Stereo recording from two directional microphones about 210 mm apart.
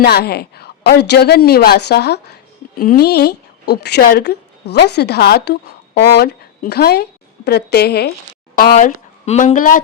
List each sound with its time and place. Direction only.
0.0 s speech: 50° left (ahead or behind)